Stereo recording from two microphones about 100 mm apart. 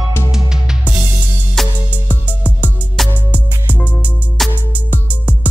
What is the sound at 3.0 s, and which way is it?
Music, centre (ahead or behind).